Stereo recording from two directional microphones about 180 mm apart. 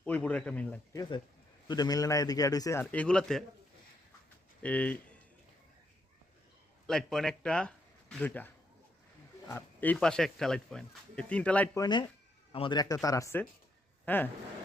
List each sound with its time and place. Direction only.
0.0 s speech: 10° left (ahead or behind)
1.6 s a man's voice: 20° left (ahead or behind); by 3.4 s 5° left (ahead or behind)
4.6 s speech: 5° left (ahead or behind)
6.8 s speech: centre (ahead or behind)
9.5 s speech: 10° left (ahead or behind)
11.8 s a man's voice: 25° left (ahead or behind)